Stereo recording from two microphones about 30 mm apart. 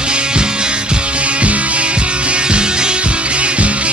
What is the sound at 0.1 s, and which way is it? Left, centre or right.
Music, right.